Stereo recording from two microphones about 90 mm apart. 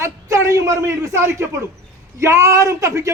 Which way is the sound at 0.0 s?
35° right (ahead or behind).